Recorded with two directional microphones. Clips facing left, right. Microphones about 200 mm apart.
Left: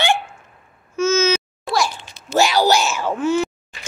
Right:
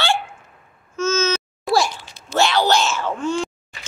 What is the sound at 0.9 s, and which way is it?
Babbling, 10° left (ahead or behind).